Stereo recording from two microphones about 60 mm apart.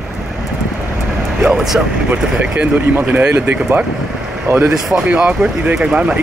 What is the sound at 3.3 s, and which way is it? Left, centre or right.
Speech, right.